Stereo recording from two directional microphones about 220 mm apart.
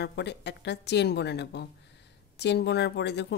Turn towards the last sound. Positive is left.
turn(degrees=50)  # may be behind; listen again after turning